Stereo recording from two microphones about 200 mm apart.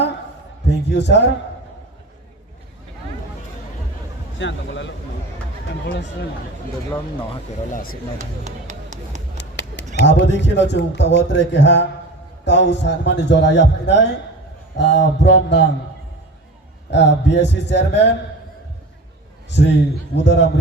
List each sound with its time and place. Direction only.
0.7 s a man's voice: 60° left (ahead or behind)
4.4 s a man's voice: 65° left (ahead or behind)
7.7 s speech: 45° left (ahead or behind)
8.2 s a sound: 35° right (ahead or behind)
9.4 s a man's voice: 60° left (ahead or behind)
16.9 s a man's voice: 60° left (ahead or behind)
19.5 s a man's voice: 60° left (ahead or behind)